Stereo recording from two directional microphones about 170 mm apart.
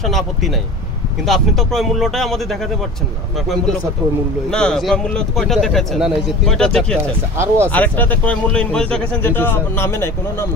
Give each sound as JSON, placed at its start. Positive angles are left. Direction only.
{"t": 0.0, "sound": "speech", "side_deg": 0}
{"t": 4.5, "sound": "speech", "side_deg": 5}
{"t": 7.3, "sound": "speech", "side_deg": -15}
{"t": 7.7, "sound": "speech", "side_deg": 10}